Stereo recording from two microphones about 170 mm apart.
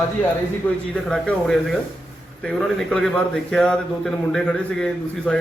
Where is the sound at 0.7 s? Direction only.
10° left (ahead or behind).